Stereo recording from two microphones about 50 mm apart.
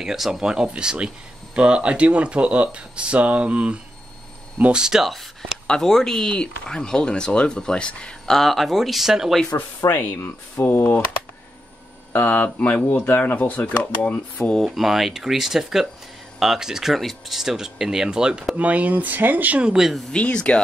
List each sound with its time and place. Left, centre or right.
0.0 s speech: centre; by 3.8 s right
4.7 s speech: centre
5.7 s speech: centre
8.3 s speech: centre
9.5 s speech: left
9.8 s speech: left
12.1 s speech: left
13.4 s speech: left
14.6 s speech: centre
18.6 s speech: right
19.6 s speech: centre
20.1 s speech: left